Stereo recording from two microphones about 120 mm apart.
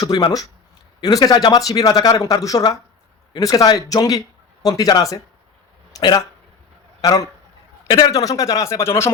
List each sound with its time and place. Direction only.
0.0 s a man's voice: 35° left (ahead or behind)